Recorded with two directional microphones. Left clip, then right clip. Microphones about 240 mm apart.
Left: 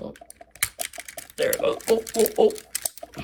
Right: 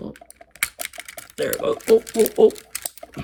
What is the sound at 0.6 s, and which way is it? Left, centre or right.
Typing, centre.